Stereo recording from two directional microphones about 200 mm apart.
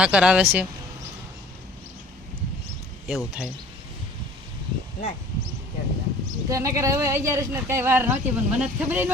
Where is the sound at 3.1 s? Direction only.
5° right (ahead or behind).